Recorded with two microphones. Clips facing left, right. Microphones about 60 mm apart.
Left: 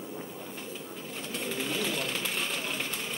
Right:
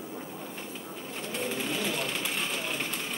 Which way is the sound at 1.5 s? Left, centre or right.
Centre.